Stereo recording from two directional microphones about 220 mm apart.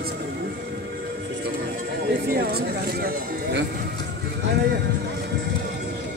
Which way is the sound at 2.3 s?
45° right (ahead or behind).